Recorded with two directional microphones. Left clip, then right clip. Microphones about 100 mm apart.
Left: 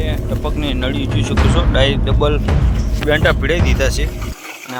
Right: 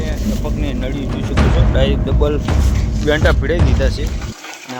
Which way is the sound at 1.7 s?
40° right (ahead or behind).